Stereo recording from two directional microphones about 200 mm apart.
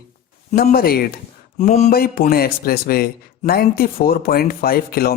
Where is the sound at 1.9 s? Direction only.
50° left (ahead or behind).